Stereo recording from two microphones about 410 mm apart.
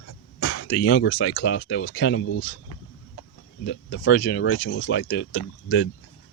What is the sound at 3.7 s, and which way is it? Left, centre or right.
Speech, left.